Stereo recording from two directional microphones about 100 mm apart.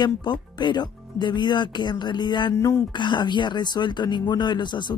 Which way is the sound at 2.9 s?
50° left (ahead or behind).